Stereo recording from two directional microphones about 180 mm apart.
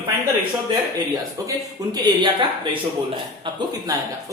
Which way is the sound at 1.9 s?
25° right (ahead or behind).